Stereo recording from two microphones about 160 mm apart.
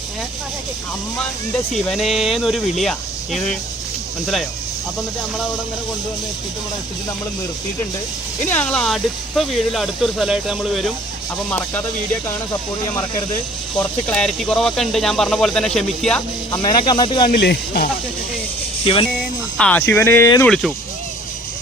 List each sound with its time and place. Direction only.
1.7 s speech: centre (ahead or behind)
8.4 s speech: 10° left (ahead or behind)
11.5 s speech: 10° left (ahead or behind)
14.1 s speech: 5° left (ahead or behind)
16.5 s speech: 25° left (ahead or behind)
17.3 s speech: 90° left
18.9 s speech: 35° left (ahead or behind)
19.5 s speech: 10° left (ahead or behind)
20.4 s speech: centre (ahead or behind)